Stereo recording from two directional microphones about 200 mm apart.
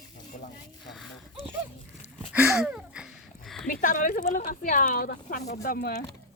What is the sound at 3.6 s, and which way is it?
A woman's voice, 40° left (ahead or behind).